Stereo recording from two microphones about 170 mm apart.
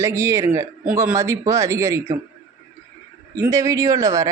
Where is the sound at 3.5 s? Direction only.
20° right (ahead or behind).